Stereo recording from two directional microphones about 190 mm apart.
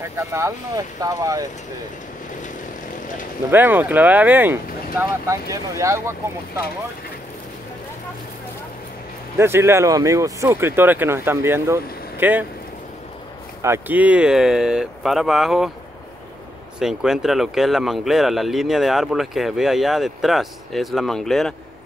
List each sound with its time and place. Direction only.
0.1 s speech: 15° right (ahead or behind)
3.4 s speech: 10° right (ahead or behind)
9.4 s speech: 15° right (ahead or behind)
13.6 s speech: 10° right (ahead or behind)
16.8 s speech: 5° right (ahead or behind)